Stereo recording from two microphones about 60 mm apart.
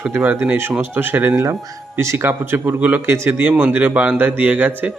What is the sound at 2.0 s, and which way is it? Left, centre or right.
A man's voice, right.